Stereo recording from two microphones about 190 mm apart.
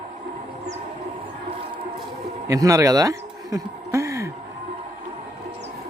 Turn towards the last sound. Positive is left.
turn(degrees=-15)  # may be behind; listen again after turning